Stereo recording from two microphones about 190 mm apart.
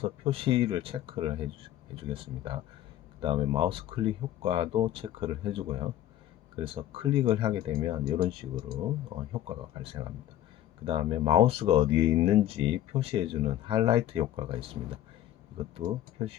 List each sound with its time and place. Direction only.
0.0 s speech: 30° right (ahead or behind)